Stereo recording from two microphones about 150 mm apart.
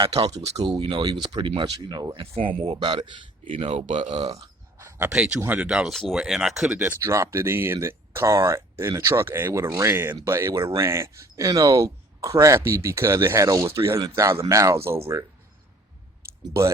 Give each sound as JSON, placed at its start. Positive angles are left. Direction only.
{"t": 0.0, "sound": "speech", "side_deg": -40}
{"t": 0.8, "sound": "speech", "side_deg": -30}
{"t": 2.2, "sound": "speech", "side_deg": -40}
{"t": 4.8, "sound": "speech", "side_deg": -15}
{"t": 16.4, "sound": "speech", "side_deg": -20}